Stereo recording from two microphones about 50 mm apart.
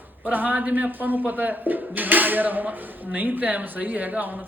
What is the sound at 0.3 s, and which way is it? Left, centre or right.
Speech, right.